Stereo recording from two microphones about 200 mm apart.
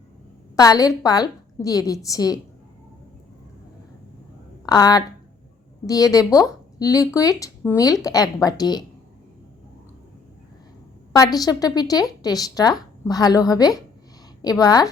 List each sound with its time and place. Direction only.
0.5 s speech: 15° left (ahead or behind)
4.6 s speech: 20° left (ahead or behind)
11.1 s a woman's voice: 20° left (ahead or behind)